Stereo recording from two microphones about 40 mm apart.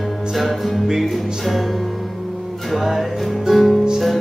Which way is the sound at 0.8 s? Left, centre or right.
Centre.